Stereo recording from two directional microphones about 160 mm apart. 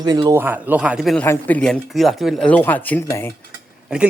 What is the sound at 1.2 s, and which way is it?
Speech, 10° left (ahead or behind).